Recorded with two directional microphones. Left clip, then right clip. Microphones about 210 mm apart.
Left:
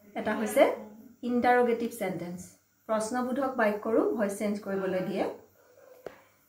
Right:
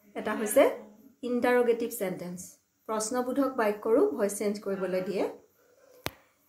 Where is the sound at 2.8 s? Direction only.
50° right (ahead or behind).